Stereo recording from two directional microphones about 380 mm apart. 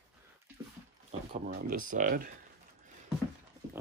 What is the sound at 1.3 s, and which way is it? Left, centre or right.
Speech, right.